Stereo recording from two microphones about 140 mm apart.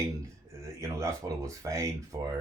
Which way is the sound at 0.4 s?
20° right (ahead or behind).